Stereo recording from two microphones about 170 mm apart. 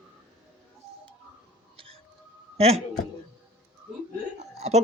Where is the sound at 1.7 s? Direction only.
30° right (ahead or behind).